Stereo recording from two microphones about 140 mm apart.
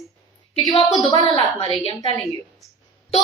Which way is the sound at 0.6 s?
30° left (ahead or behind).